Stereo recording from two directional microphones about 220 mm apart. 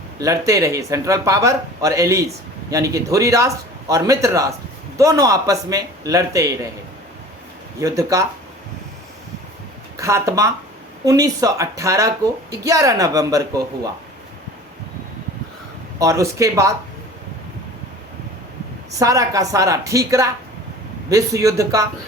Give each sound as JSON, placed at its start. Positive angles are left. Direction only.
{"t": 0.2, "sound": "speech", "side_deg": -15}
{"t": 7.8, "sound": "speech", "side_deg": -15}
{"t": 10.0, "sound": "speech", "side_deg": -15}
{"t": 16.0, "sound": "speech", "side_deg": -15}
{"t": 18.9, "sound": "speech", "side_deg": -15}